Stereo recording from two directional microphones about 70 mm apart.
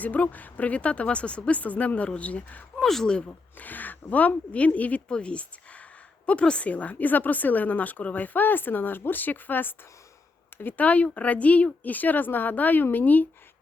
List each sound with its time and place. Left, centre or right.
0.0 s a woman's voice: left
2.8 s speech: centre
3.2 s a woman's voice: left